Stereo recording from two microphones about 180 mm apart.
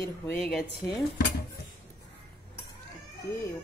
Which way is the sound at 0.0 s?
5° left (ahead or behind).